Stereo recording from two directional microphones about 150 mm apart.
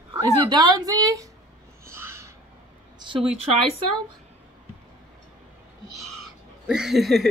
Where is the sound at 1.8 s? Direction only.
15° right (ahead or behind).